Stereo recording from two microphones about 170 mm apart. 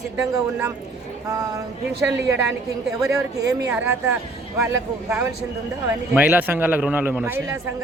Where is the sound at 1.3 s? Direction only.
20° right (ahead or behind).